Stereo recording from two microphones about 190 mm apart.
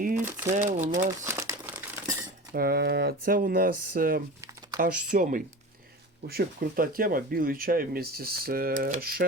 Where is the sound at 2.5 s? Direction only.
50° right (ahead or behind).